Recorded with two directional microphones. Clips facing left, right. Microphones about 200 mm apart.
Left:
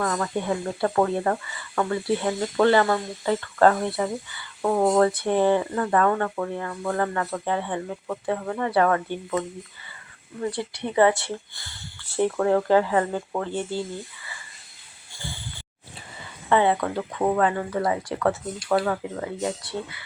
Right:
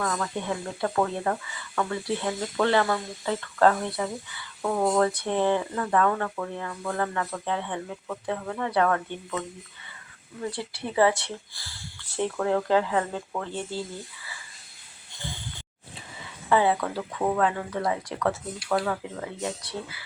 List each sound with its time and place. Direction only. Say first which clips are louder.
0.0 s speech: left 3 dB; 5° left (ahead or behind)
4.6 s speech: left 4 dB; 20° left (ahead or behind)
4.9 s speech: left 4 dB; 5° left (ahead or behind)
8.3 s speech: left 4 dB; 5° left (ahead or behind)
10.4 s speech: left 4 dB; centre (ahead or behind)
16.5 s speech: left 2 dB; 5° right (ahead or behind)
17.0 s speech: left 4 dB; 10° left (ahead or behind)